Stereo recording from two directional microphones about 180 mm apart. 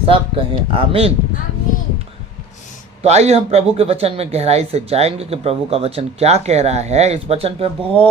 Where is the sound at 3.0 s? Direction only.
35° right (ahead or behind).